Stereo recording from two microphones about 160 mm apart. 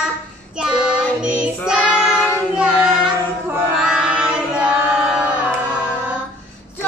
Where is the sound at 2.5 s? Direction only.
5° right (ahead or behind).